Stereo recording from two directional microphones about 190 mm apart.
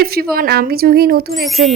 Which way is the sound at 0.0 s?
55° right (ahead or behind).